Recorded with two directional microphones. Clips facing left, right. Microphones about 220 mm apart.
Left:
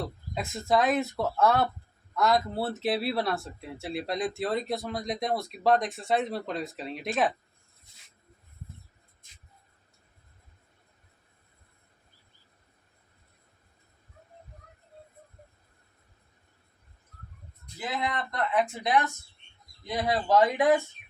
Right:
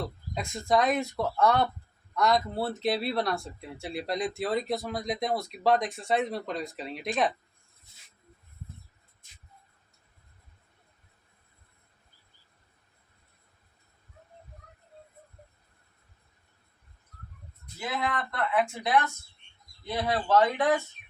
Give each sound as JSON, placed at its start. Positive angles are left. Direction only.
{"t": 0.3, "sound": "speech", "side_deg": 0}
{"t": 17.7, "sound": "speech", "side_deg": 20}